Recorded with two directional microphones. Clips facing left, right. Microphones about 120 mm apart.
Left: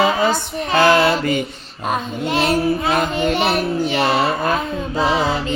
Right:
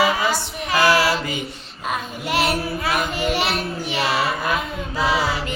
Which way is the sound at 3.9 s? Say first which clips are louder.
Left 2 dB; 60° left (ahead or behind).